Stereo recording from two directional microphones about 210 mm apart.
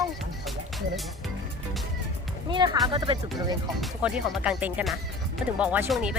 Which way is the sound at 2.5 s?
20° right (ahead or behind).